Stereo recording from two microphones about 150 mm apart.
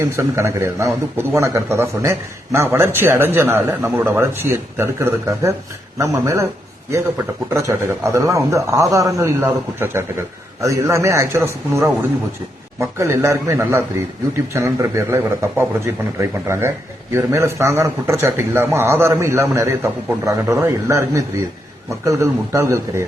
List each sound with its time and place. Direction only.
0.0 s a man's voice: 20° right (ahead or behind)
7.5 s a man's voice: 15° right (ahead or behind)
13.0 s a man's voice: 20° right (ahead or behind)